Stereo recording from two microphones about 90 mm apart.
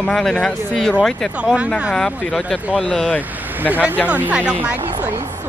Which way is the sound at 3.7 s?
20° right (ahead or behind).